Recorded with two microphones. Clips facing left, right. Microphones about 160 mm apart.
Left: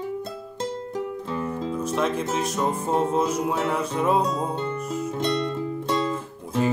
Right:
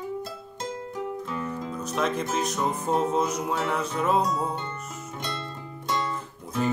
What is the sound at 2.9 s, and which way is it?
Music, 30° left (ahead or behind).